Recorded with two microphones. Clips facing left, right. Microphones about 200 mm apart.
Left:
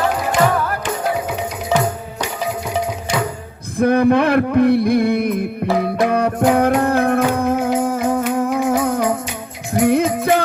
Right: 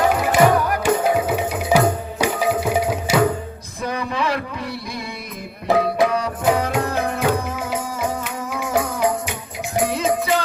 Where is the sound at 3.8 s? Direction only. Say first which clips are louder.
Left 11 dB; 60° left (ahead or behind).